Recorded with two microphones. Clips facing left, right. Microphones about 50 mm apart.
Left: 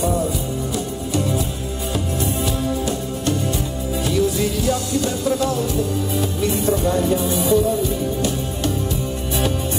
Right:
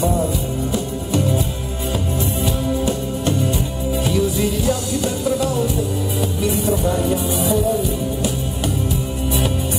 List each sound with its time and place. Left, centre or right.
2.4 s music: right
4.4 s music: centre